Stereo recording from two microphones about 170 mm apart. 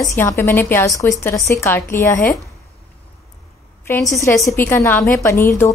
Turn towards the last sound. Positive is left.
turn(degrees=15)  # may be behind; listen again after turning